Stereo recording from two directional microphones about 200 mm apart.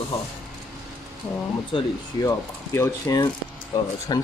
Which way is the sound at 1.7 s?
15° left (ahead or behind).